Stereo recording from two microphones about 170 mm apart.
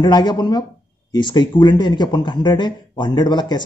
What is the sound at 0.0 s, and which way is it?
Speech, 25° left (ahead or behind).